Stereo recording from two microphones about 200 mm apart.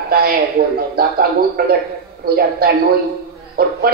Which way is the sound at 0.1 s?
50° right (ahead or behind).